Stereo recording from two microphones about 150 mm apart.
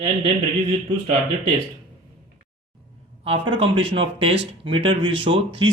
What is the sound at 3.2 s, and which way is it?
Speech, 35° right (ahead or behind).